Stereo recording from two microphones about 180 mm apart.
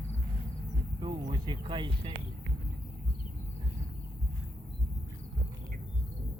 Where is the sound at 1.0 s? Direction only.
25° right (ahead or behind).